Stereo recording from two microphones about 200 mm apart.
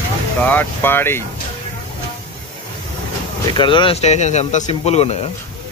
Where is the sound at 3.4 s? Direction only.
25° left (ahead or behind).